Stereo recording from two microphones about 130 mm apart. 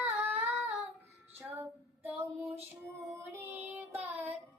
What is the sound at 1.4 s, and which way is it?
Female singing, 20° right (ahead or behind).